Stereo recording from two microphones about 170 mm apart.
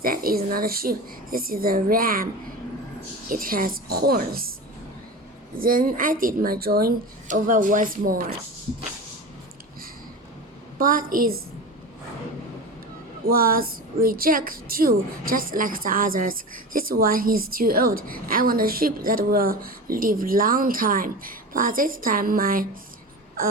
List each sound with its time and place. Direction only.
0.0 s a woman's voice: 60° right (ahead or behind)
3.2 s a woman's voice: 55° right (ahead or behind)
5.5 s a woman's voice: 55° right (ahead or behind)
10.8 s a woman's voice: 55° right (ahead or behind)
13.2 s a woman's voice: 60° right (ahead or behind)